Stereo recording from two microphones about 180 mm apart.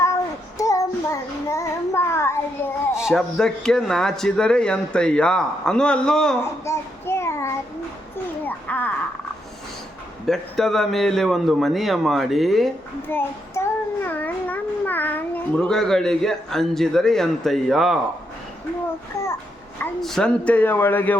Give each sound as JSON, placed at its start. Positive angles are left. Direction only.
{"t": 0.6, "sound": "child singing", "side_deg": 20}
{"t": 2.9, "sound": "speech", "side_deg": -5}
{"t": 6.7, "sound": "child singing", "side_deg": 15}
{"t": 8.4, "sound": "speech", "side_deg": 10}
{"t": 10.2, "sound": "speech", "side_deg": 0}
{"t": 13.1, "sound": "child singing", "side_deg": 15}
{"t": 19.8, "sound": "speech", "side_deg": 0}